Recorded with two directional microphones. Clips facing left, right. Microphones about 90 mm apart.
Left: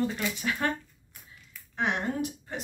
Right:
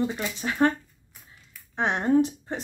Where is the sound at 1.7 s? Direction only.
30° right (ahead or behind).